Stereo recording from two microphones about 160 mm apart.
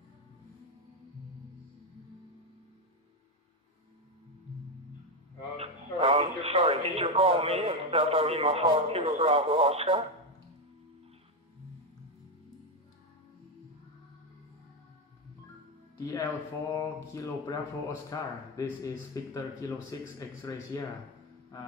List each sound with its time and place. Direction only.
5.6 s speech: 40° right (ahead or behind)
16.0 s speech: 20° left (ahead or behind)